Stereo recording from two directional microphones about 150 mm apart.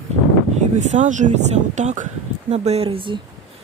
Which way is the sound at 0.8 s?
55° right (ahead or behind).